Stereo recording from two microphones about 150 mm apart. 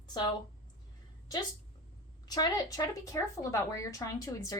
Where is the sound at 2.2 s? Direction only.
25° left (ahead or behind).